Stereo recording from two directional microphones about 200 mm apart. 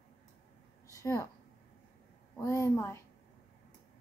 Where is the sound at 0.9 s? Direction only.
15° left (ahead or behind).